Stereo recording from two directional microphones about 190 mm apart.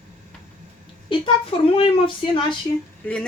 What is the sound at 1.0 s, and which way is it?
Speech, 30° left (ahead or behind).